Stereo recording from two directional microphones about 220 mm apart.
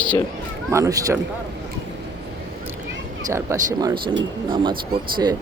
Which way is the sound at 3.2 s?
10° right (ahead or behind).